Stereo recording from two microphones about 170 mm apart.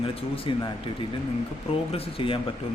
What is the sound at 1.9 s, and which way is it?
Speech, 30° left (ahead or behind).